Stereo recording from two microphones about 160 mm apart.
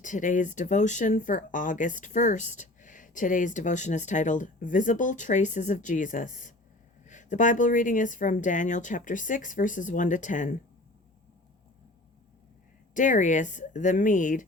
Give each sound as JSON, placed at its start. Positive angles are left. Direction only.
{"t": 0.0, "sound": "speech", "side_deg": 55}
{"t": 12.9, "sound": "speech", "side_deg": 55}